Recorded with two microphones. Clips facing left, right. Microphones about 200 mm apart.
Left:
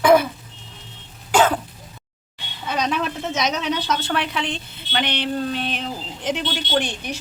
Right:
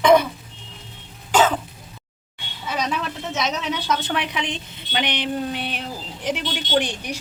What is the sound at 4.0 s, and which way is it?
A woman's voice, 15° right (ahead or behind).